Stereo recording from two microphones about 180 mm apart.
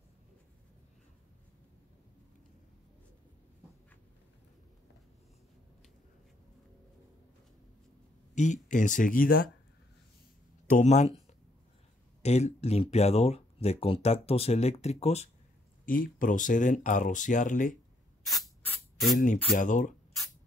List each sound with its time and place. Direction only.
8.4 s speech: 45° left (ahead or behind)
10.7 s speech: 40° left (ahead or behind)
12.2 s speech: 35° left (ahead or behind)
15.8 s speech: 50° left (ahead or behind)
18.6 s spray: 5° left (ahead or behind)
19.5 s speech: 45° left (ahead or behind)